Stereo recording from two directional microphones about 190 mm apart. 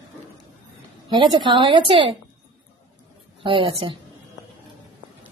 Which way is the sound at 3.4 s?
25° right (ahead or behind).